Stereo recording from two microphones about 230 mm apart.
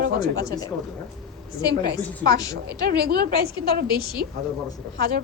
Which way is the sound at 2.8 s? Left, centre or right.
Right.